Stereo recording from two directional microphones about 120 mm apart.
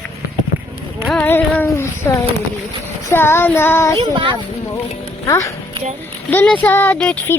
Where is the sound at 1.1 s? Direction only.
15° left (ahead or behind).